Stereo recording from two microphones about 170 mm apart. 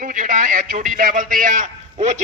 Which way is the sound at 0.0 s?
50° right (ahead or behind).